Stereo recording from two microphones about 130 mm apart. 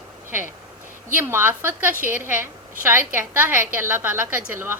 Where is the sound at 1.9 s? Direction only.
90° right.